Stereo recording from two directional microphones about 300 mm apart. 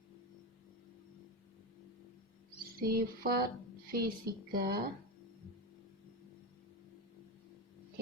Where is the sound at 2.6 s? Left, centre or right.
Right.